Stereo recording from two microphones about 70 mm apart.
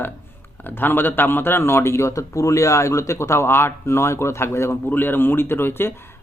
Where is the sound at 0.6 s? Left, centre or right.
Left.